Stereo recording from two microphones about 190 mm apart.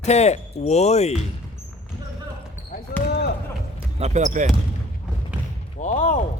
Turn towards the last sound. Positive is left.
turn(degrees=40)  # may be behind; listen again after turning